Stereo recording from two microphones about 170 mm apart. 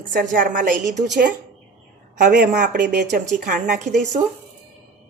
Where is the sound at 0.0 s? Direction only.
55° right (ahead or behind).